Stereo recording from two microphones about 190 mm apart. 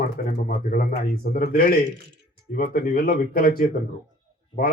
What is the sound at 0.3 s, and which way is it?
Speech, 45° left (ahead or behind).